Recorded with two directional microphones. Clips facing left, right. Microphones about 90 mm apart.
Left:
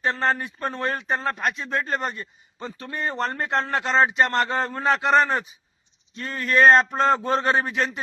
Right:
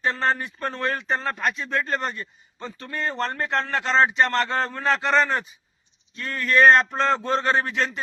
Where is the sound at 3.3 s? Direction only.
30° left (ahead or behind).